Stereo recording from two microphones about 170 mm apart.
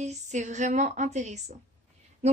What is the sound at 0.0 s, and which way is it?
Speech, 45° right (ahead or behind).